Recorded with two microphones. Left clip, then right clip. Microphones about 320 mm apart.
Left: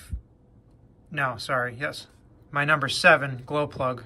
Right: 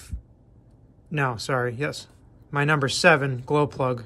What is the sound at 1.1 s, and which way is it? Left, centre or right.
Speech, centre.